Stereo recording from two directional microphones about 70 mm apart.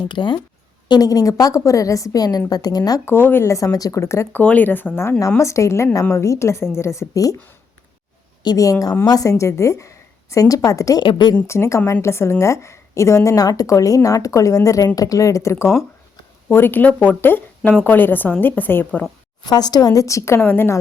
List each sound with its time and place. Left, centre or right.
0.2 s speech: left
0.9 s a woman's voice: left
2.1 s a woman's voice: left
3.1 s speech: left
3.5 s a woman's voice: left
4.0 s speech: left
4.3 s speech: left
5.4 s a woman's voice: left
8.5 s a woman's voice: left
9.4 s a woman's voice: left
11.4 s a woman's voice: left
16.5 s speech: left
19.5 s a woman's voice: left